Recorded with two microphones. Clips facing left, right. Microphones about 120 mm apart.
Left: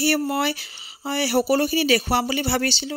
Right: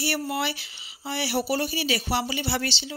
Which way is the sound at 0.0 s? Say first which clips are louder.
Left 6 dB; 45° left (ahead or behind).